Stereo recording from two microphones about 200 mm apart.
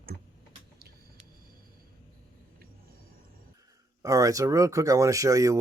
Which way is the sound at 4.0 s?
15° right (ahead or behind).